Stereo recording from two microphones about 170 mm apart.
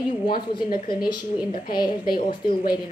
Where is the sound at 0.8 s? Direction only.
25° left (ahead or behind).